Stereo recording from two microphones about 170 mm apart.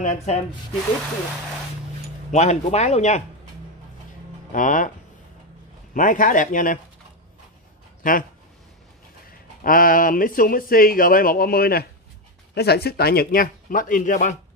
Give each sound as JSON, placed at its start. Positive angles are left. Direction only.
{"t": 0.0, "sound": "speech", "side_deg": 45}
{"t": 2.3, "sound": "speech", "side_deg": 40}
{"t": 4.5, "sound": "speech", "side_deg": 50}
{"t": 5.9, "sound": "speech", "side_deg": 50}
{"t": 8.0, "sound": "speech", "side_deg": 55}
{"t": 9.6, "sound": "speech", "side_deg": 55}